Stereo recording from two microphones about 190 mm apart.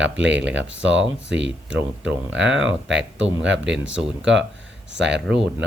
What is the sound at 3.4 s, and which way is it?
Speech, 70° right (ahead or behind).